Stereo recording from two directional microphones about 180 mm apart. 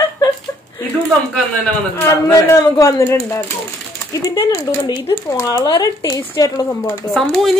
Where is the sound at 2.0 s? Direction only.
15° left (ahead or behind).